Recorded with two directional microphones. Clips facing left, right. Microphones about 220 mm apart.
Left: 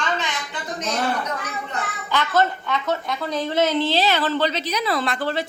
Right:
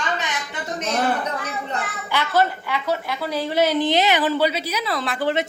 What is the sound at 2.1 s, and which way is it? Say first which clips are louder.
A woman's voice: even; 10° right (ahead or behind).